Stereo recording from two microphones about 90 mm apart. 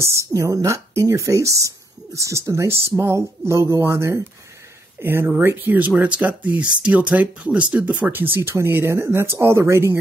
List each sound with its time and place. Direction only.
0.0 s speech: 35° right (ahead or behind)